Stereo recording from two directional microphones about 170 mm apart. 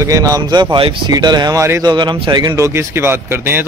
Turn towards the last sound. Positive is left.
turn(degrees=-10)  # may be behind; listen again after turning